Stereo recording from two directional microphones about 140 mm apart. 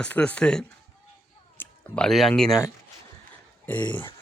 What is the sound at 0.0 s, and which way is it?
Speech, 10° left (ahead or behind).